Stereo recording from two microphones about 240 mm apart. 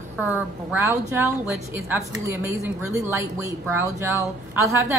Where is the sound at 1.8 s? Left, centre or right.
Centre.